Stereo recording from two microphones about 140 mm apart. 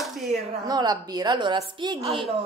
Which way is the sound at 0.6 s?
30° right (ahead or behind).